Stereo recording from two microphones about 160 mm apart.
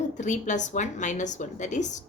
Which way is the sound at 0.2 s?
50° left (ahead or behind).